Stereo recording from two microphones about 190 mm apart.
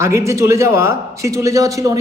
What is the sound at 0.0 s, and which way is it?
A man's voice, 15° right (ahead or behind).